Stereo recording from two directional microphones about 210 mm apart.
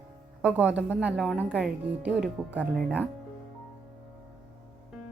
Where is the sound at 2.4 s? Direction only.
5° left (ahead or behind).